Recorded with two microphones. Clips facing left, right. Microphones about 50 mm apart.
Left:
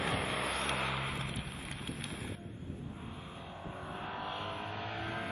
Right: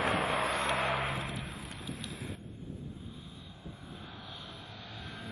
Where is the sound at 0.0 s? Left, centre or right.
Right.